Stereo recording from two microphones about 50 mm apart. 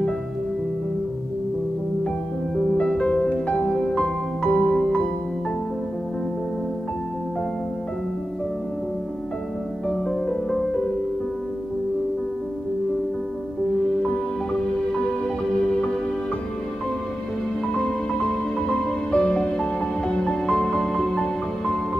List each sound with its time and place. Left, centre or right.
2.5 s music: centre
9.8 s music: centre
14.0 s music: centre
17.7 s music: centre